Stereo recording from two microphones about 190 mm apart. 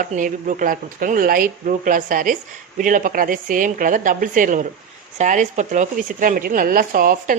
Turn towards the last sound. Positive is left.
turn(degrees=-45)  # may be behind; listen again after turning